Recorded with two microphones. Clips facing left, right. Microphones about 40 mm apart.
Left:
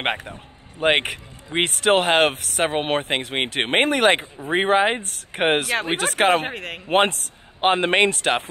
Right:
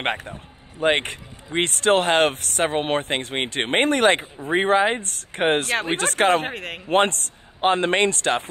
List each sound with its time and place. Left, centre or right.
0.0 s speech: centre
0.7 s speech: left
1.0 s speech: centre
6.9 s speech: centre
8.1 s speech: centre